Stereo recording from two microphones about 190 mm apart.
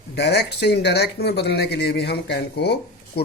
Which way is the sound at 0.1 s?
60° left (ahead or behind).